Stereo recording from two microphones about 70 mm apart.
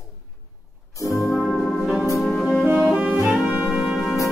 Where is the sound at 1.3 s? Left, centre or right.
Centre.